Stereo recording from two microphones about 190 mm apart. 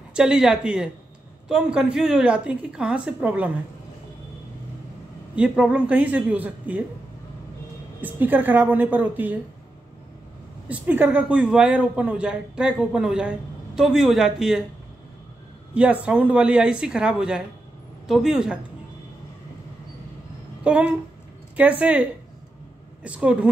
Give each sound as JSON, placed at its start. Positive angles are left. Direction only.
{"t": 0.1, "sound": "a woman's voice", "side_deg": -5}
{"t": 5.3, "sound": "speech", "side_deg": -5}
{"t": 8.0, "sound": "speech", "side_deg": -10}
{"t": 10.7, "sound": "a woman's voice", "side_deg": -10}
{"t": 15.7, "sound": "a woman's voice", "side_deg": -5}
{"t": 20.6, "sound": "speech", "side_deg": -5}
{"t": 23.0, "sound": "speech", "side_deg": -5}